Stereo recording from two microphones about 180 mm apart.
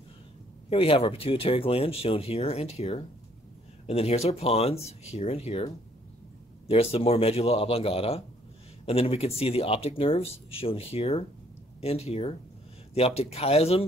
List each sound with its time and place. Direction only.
0.7 s speech: 30° left (ahead or behind)
6.7 s speech: 30° left (ahead or behind)